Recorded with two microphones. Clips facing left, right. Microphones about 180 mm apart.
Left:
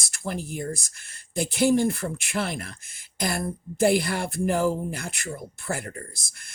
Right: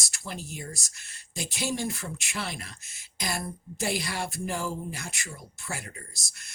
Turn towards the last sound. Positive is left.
turn(degrees=55)  # may be behind; listen again after turning